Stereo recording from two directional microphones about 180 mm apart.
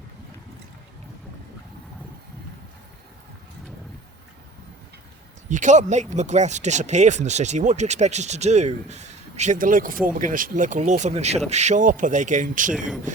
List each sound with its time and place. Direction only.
5.5 s speech: 45° right (ahead or behind)